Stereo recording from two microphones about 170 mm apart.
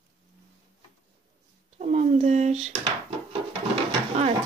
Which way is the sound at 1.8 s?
45° right (ahead or behind).